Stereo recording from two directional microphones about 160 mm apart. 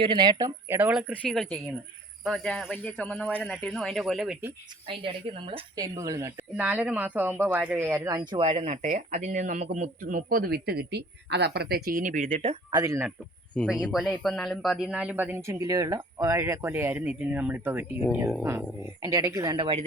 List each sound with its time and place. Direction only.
0.0 s speech: 30° right (ahead or behind); by 4.4 s centre (ahead or behind)
4.9 s speech: 35° right (ahead or behind)
12.7 s speech: 20° right (ahead or behind)
13.5 s speech: 5° left (ahead or behind); by 19.8 s 30° right (ahead or behind)